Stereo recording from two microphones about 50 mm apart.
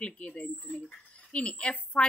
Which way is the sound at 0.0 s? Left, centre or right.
Left.